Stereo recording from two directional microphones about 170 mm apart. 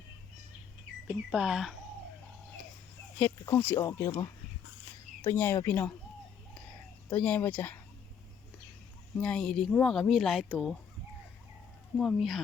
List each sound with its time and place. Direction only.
1.0 s speech: 5° right (ahead or behind)
3.2 s speech: 10° left (ahead or behind)
7.1 s speech: 10° left (ahead or behind)
9.2 s speech: 5° left (ahead or behind)
11.9 s speech: centre (ahead or behind)